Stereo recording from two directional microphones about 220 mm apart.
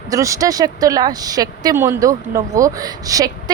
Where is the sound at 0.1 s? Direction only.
15° right (ahead or behind).